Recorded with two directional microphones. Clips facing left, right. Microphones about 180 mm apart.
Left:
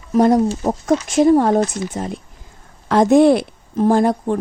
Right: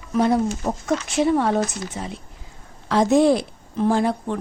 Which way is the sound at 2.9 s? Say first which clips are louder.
Left 5 dB; 55° left (ahead or behind).